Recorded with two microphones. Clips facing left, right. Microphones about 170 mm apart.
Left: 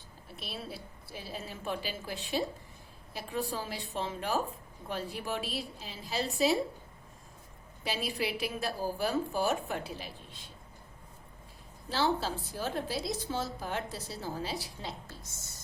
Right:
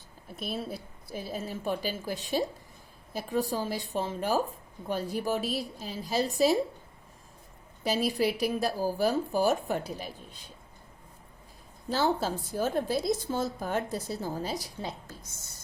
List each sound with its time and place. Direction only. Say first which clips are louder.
0.3 s a woman's voice: right 7 dB; 45° right (ahead or behind)
7.9 s a woman's voice: right 7 dB; 40° right (ahead or behind)
11.9 s a woman's voice: right 3 dB; 45° right (ahead or behind)